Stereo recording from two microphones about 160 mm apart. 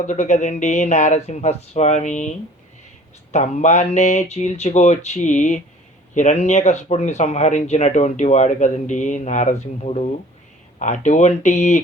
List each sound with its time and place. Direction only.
0.0 s speech: 50° left (ahead or behind)
3.3 s speech: 45° left (ahead or behind)